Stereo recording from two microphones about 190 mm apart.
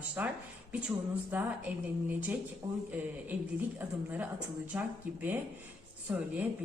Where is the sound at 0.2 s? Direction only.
10° right (ahead or behind).